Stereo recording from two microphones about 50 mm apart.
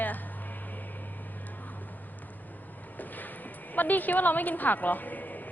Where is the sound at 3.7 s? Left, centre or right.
Left.